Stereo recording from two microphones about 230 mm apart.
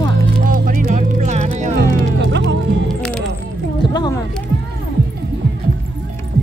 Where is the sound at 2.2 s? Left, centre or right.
Right.